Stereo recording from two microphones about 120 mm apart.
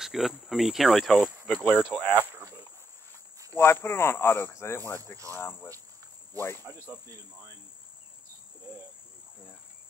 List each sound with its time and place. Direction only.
0.0 s cricket: centre (ahead or behind)
0.5 s speech: centre (ahead or behind)
1.5 s speech: 10° left (ahead or behind)
2.3 s cricket: 20° right (ahead or behind)
3.5 s speech: 20° left (ahead or behind)